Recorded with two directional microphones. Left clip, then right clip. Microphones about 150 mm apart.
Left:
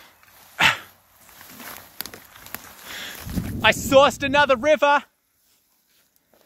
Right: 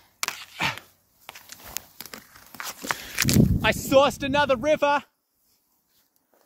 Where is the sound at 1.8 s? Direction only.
10° left (ahead or behind).